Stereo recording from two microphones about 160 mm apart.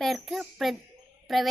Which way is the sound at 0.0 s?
Centre (ahead or behind).